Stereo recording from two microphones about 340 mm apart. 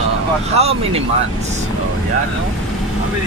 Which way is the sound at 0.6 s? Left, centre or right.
Centre.